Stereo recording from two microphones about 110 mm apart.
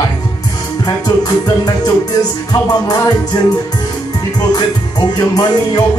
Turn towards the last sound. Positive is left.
turn(degrees=35)  # may be behind; listen again after turning